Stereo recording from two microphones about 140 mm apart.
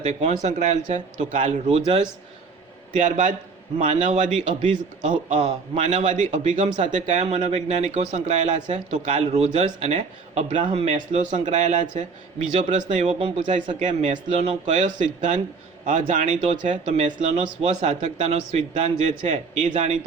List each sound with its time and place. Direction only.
0.0 s a man's voice: 55° right (ahead or behind)
1.6 s a man's voice: 40° right (ahead or behind)
3.0 s a man's voice: 65° right (ahead or behind); by 13.5 s 45° right (ahead or behind)
13.7 s a man's voice: 60° right (ahead or behind)
14.3 s a man's voice: 50° right (ahead or behind)